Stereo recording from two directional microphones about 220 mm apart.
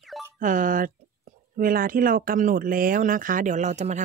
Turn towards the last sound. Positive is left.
turn(degrees=-30)  # may be behind; listen again after turning